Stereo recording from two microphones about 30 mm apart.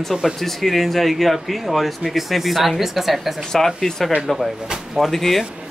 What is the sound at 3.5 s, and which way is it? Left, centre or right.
Speech, centre.